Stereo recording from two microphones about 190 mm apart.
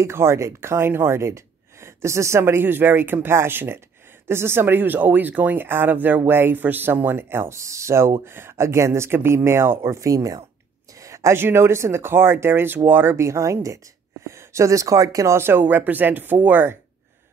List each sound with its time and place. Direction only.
0.0 s speech: 15° right (ahead or behind)